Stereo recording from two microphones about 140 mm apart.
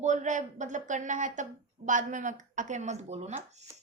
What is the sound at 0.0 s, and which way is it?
A woman's voice, 60° right (ahead or behind).